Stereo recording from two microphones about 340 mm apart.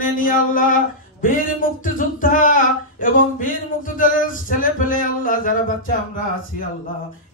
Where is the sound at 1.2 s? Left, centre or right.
Left.